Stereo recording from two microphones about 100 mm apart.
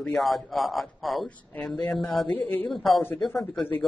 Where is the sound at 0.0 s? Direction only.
5° left (ahead or behind).